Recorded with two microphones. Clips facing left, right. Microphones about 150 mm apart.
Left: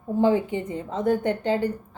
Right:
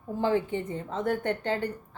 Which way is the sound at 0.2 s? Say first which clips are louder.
Left 5 dB; 15° left (ahead or behind).